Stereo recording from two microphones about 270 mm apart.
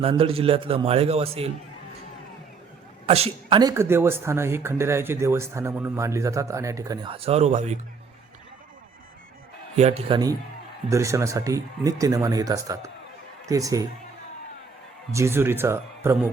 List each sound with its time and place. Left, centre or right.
0.0 s a man's voice: right
3.1 s speech: right
9.7 s a man's voice: right
15.1 s speech: centre